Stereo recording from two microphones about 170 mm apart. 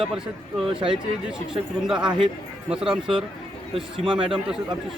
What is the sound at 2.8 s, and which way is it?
Speech, 30° right (ahead or behind).